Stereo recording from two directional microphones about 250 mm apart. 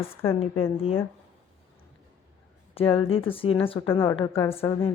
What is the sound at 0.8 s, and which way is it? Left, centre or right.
Speech, left.